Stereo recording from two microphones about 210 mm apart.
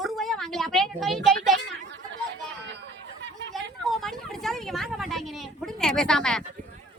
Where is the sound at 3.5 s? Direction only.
Centre (ahead or behind).